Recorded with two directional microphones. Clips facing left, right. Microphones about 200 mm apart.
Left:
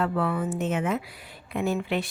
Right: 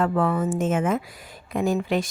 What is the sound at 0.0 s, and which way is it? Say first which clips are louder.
Speech: right 4 dB; 45° right (ahead or behind).